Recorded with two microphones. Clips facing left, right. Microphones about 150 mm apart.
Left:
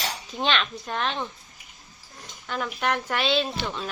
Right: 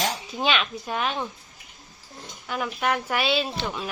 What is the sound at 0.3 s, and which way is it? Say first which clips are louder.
Speech: right 1 dB; 5° right (ahead or behind).